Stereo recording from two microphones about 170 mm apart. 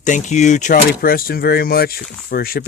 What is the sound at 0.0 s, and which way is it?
Speech, 45° left (ahead or behind).